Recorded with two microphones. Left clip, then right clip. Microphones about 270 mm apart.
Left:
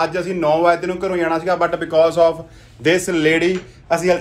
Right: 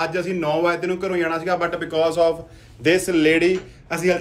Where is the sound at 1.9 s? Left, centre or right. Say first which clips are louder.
Left 5 dB; centre.